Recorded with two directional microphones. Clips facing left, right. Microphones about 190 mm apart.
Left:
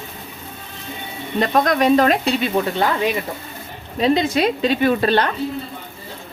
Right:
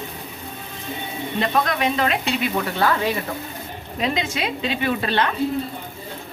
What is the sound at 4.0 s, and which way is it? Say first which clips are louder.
A woman's voice: left 8 dB; 35° left (ahead or behind).